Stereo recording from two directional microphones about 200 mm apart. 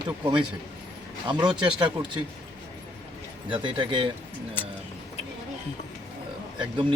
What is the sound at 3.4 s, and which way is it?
Speech, 25° right (ahead or behind).